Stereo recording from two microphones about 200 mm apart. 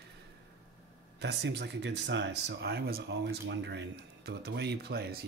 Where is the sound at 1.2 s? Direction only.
55° right (ahead or behind).